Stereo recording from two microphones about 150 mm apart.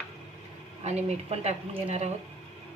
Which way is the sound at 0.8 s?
45° right (ahead or behind).